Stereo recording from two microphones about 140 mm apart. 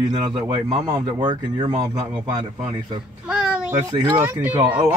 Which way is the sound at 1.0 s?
35° right (ahead or behind).